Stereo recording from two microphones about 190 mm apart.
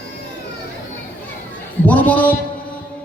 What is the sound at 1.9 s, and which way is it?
Speech, 10° left (ahead or behind).